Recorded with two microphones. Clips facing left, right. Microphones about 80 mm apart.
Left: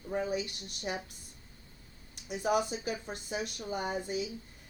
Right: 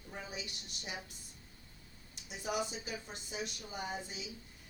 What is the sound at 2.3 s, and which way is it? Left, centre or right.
A woman's voice, left.